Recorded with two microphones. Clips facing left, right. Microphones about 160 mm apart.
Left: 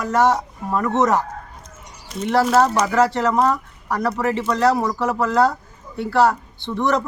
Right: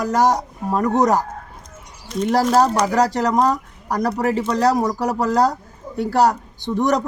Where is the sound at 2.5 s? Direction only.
35° right (ahead or behind).